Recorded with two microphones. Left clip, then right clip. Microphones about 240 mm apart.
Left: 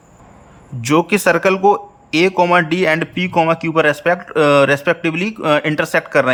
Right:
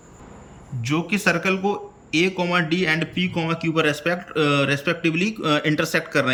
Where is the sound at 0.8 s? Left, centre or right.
Left.